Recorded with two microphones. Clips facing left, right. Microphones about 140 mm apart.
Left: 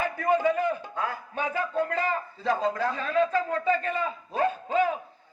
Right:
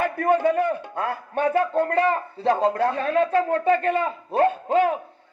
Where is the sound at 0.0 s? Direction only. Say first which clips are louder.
Right 4 dB; 60° right (ahead or behind).